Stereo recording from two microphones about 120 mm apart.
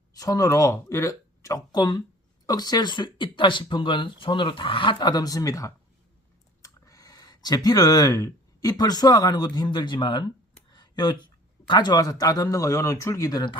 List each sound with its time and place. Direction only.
0.2 s speech: 30° left (ahead or behind)
6.6 s a sound: 30° left (ahead or behind)
8.8 s speech: 35° left (ahead or behind)